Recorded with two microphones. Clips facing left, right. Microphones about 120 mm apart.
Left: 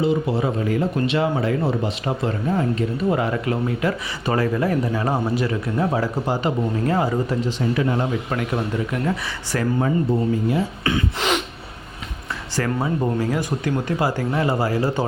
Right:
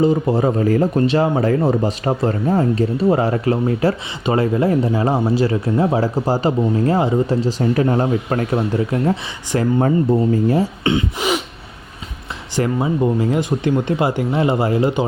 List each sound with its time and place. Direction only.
0.0 s speech: 40° right (ahead or behind)
7.6 s speech: 40° right (ahead or behind)
9.8 s speech: 40° right (ahead or behind)
10.8 s speech: 25° right (ahead or behind)
11.2 s gasp: 10° right (ahead or behind)
12.5 s speech: 20° right (ahead or behind)